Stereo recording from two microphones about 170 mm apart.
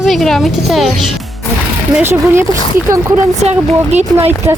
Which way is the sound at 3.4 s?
40° right (ahead or behind).